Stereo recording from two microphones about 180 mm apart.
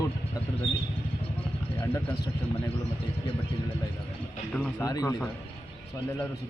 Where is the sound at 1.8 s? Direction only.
15° left (ahead or behind).